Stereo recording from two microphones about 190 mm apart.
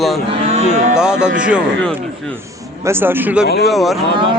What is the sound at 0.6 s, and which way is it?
Cattle, 40° right (ahead or behind).